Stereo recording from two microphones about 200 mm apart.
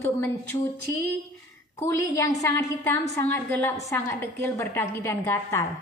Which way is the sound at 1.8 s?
15° left (ahead or behind).